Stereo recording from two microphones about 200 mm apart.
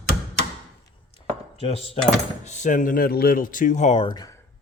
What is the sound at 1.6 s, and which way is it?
Speech, 30° left (ahead or behind).